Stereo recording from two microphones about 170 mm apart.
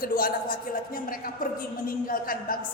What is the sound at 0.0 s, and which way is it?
A woman's voice, 55° left (ahead or behind).